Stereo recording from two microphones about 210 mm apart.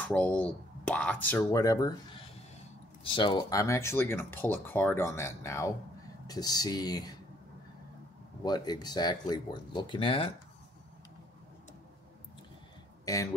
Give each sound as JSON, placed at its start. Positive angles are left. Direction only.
{"t": 0.0, "sound": "speech", "side_deg": 5}
{"t": 8.5, "sound": "speech", "side_deg": 20}
{"t": 13.0, "sound": "speech", "side_deg": 15}